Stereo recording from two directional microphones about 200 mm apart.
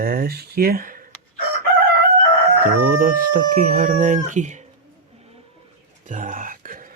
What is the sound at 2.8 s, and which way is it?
Speech, 45° right (ahead or behind).